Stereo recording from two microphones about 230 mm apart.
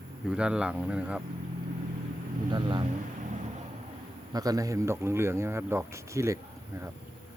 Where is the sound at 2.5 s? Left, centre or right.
Right.